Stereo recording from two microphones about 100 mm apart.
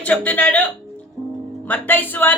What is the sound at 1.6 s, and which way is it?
Speech, 15° left (ahead or behind).